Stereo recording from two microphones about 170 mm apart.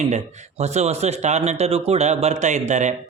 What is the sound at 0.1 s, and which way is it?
Speech, 40° right (ahead or behind).